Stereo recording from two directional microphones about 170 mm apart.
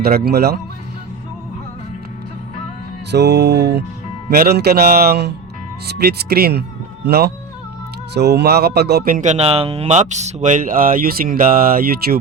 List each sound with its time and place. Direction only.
0.0 s speech: 65° right (ahead or behind)
3.1 s music: 85° right
4.3 s speech: 70° right (ahead or behind)